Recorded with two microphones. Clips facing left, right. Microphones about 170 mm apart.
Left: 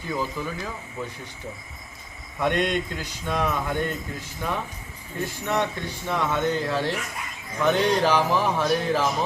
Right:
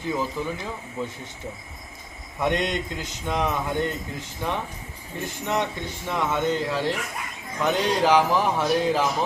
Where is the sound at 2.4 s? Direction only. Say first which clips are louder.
Left 1 dB; 20° right (ahead or behind).